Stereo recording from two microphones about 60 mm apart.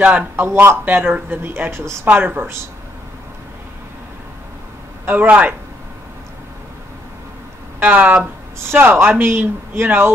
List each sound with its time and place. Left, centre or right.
0.4 s speech: right
0.8 s speech: right
2.0 s speech: right
5.0 s a man's voice: right
7.8 s a man's voice: right
8.6 s speech: right